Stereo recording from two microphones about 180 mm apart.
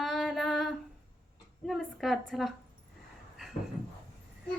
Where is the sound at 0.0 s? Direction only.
Centre (ahead or behind).